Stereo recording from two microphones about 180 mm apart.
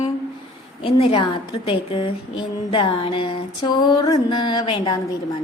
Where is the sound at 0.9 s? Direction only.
30° left (ahead or behind).